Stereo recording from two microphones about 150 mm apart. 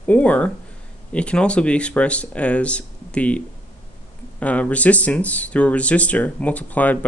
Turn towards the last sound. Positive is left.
turn(degrees=10)  # may be behind; listen again after turning